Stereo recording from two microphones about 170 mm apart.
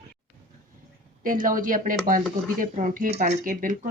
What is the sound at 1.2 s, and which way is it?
Speech, 55° right (ahead or behind).